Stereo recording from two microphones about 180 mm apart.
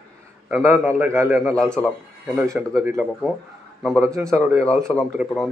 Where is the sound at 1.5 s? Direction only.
5° left (ahead or behind).